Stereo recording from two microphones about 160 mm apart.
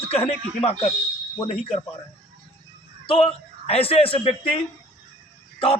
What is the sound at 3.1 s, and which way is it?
A man's voice, 35° left (ahead or behind).